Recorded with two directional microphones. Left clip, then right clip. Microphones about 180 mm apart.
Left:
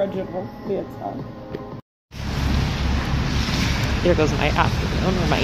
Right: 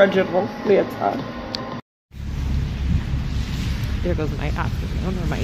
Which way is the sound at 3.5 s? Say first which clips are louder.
Left 8 dB; 60° left (ahead or behind).